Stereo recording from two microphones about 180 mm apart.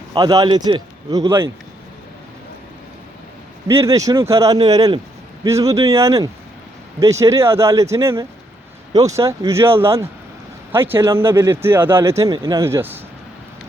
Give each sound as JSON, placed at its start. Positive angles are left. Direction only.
{"t": 0.1, "sound": "a man's voice", "side_deg": -20}
{"t": 3.7, "sound": "a man's voice", "side_deg": -15}